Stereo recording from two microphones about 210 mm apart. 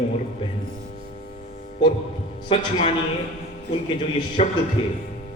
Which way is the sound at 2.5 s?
25° left (ahead or behind).